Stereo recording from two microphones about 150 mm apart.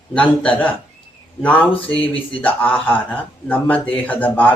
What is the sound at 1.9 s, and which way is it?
Speech, 35° left (ahead or behind).